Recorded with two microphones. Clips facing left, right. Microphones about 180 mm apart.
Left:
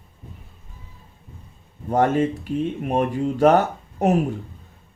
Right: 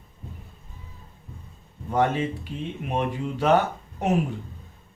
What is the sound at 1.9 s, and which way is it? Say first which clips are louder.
Speech: left 4 dB; 45° left (ahead or behind).